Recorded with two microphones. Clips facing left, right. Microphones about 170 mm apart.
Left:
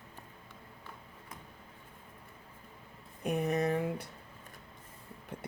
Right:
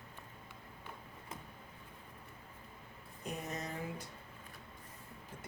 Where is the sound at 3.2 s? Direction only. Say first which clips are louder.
Left 12 dB; 60° left (ahead or behind).